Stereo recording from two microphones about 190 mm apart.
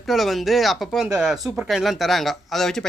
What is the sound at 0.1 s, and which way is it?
Speech, centre (ahead or behind).